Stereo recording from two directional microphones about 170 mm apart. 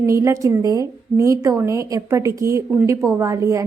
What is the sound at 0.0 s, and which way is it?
A woman's voice, 15° right (ahead or behind).